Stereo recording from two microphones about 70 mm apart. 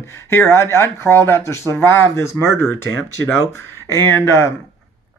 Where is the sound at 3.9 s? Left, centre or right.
Left.